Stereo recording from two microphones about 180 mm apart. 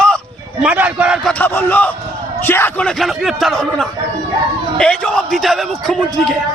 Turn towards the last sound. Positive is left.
turn(degrees=0)  # may be behind; listen again after turning